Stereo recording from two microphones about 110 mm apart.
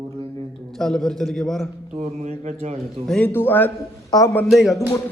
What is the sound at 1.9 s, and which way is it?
Speech, 85° right.